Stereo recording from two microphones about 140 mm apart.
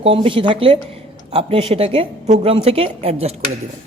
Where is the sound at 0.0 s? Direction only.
40° right (ahead or behind).